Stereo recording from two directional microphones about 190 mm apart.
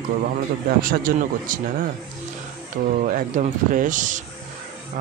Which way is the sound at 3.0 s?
40° right (ahead or behind).